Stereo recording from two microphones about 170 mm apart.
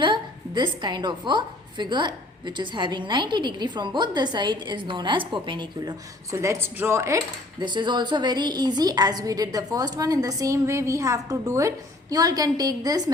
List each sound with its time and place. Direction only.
0.0 s a woman's voice: 25° right (ahead or behind)
6.3 s speech: 15° right (ahead or behind)